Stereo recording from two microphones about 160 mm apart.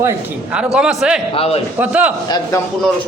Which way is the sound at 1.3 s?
40° left (ahead or behind).